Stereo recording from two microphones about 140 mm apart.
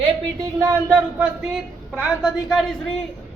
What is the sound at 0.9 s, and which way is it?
A man's voice, 10° right (ahead or behind).